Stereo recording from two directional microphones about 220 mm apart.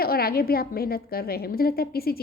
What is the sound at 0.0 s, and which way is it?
A woman's voice, 45° left (ahead or behind).